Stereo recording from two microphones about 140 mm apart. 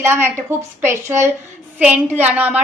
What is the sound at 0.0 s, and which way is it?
A woman's voice, 20° right (ahead or behind).